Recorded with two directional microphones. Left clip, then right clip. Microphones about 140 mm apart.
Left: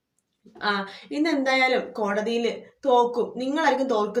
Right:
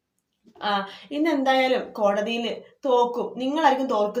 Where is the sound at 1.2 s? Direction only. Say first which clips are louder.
Right 1 dB; 15° right (ahead or behind).